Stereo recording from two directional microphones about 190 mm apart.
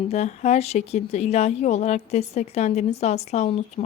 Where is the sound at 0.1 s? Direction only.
35° left (ahead or behind).